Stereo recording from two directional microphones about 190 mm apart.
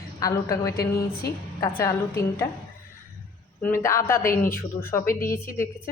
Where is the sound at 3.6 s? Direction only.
15° left (ahead or behind).